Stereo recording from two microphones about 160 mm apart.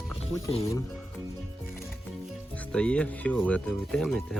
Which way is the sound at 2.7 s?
5° left (ahead or behind).